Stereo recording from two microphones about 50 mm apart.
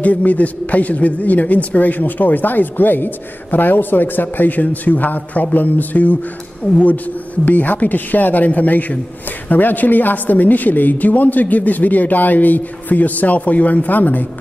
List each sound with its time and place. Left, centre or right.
0.0 s a woman's voice: left